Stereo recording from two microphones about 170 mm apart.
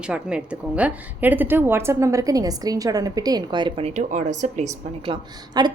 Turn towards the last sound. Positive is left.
turn(degrees=-25)  # may be behind; listen again after turning